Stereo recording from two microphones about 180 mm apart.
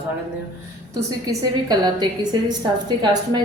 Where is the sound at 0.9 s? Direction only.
20° right (ahead or behind).